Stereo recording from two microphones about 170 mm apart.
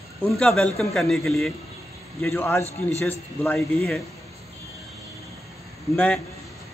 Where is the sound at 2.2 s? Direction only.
15° left (ahead or behind).